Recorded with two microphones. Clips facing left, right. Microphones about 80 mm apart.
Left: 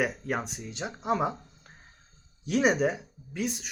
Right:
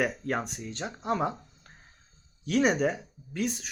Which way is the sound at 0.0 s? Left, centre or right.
Centre.